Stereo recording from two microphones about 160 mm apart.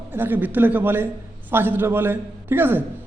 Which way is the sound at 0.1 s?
15° right (ahead or behind).